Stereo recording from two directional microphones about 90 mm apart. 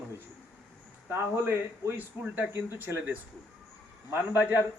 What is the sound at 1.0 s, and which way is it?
Speech, 25° right (ahead or behind).